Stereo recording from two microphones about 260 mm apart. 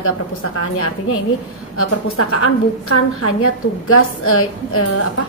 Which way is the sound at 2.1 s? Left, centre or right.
Left.